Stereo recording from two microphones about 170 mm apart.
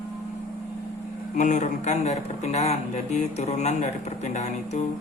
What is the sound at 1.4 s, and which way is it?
Speech, 45° left (ahead or behind).